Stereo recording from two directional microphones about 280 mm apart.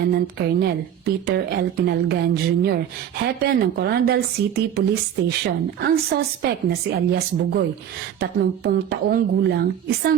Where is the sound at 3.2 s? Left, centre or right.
Right.